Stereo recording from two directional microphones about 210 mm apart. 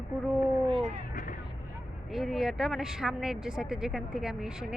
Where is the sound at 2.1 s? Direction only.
Centre (ahead or behind).